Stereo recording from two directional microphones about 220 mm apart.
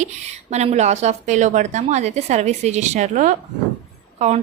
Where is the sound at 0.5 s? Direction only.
30° right (ahead or behind).